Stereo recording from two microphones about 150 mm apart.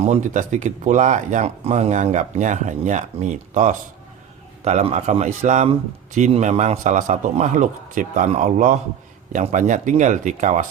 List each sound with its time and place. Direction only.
0.0 s a man's voice: 50° right (ahead or behind)